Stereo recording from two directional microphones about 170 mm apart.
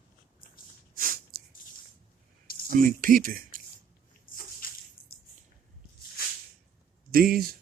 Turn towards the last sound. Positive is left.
turn(degrees=-60)  # may be behind; listen again after turning